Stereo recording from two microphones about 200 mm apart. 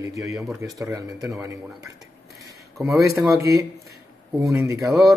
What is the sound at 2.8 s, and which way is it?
Speech, centre (ahead or behind).